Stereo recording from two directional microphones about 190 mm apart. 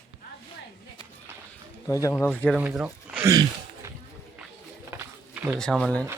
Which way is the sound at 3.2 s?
15° right (ahead or behind).